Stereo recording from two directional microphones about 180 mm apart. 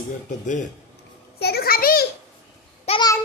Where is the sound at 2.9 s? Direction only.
25° left (ahead or behind).